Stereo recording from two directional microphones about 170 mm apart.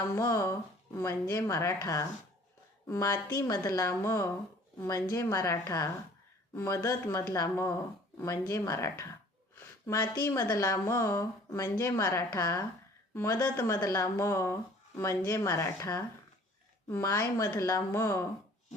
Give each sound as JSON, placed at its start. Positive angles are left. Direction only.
{"t": 0.2, "sound": "speech", "side_deg": 15}